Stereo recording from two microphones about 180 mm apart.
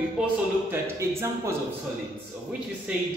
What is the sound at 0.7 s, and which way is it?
Speech, 15° right (ahead or behind).